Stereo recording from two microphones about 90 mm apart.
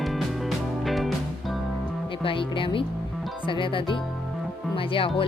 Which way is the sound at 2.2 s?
75° left (ahead or behind).